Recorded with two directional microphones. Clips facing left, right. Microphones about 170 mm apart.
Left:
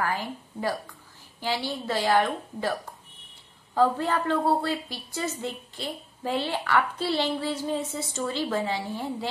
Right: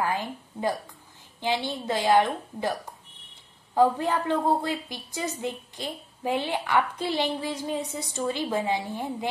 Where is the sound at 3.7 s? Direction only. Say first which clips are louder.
Right 1 dB; 15° right (ahead or behind).